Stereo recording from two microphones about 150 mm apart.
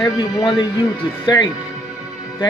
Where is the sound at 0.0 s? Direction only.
25° left (ahead or behind).